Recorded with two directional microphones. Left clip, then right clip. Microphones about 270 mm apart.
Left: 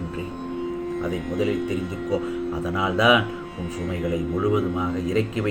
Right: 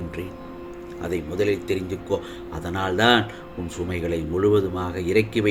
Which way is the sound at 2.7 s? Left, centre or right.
Right.